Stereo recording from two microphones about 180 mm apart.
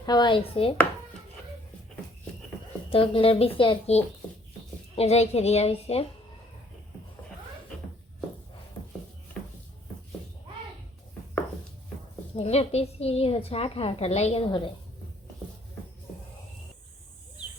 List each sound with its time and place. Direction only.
0.0 s speech: 25° left (ahead or behind)
2.9 s a woman's voice: 30° left (ahead or behind)
12.4 s a woman's voice: 35° left (ahead or behind)